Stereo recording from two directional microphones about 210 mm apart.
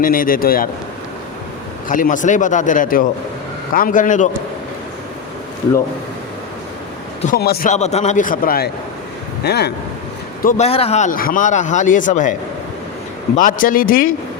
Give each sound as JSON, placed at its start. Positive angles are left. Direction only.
{"t": 0.0, "sound": "speech", "side_deg": 40}
{"t": 1.9, "sound": "a man's voice", "side_deg": 40}
{"t": 7.3, "sound": "speech", "side_deg": 50}
{"t": 7.7, "sound": "a man's voice", "side_deg": 30}
{"t": 10.4, "sound": "a man's voice", "side_deg": 30}